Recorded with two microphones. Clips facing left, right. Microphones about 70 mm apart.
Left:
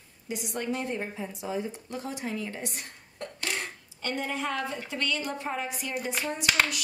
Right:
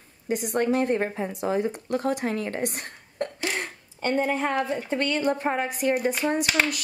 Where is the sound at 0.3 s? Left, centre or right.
Right.